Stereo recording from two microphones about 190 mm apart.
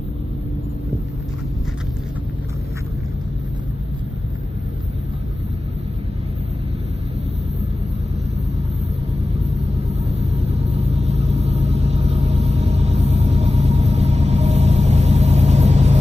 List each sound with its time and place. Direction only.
9.8 s vehicle: 35° right (ahead or behind)